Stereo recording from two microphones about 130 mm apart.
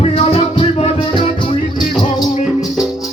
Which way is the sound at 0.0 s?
50° left (ahead or behind).